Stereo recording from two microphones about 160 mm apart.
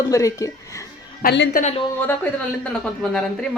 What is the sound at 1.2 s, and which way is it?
Speech, 70° left (ahead or behind).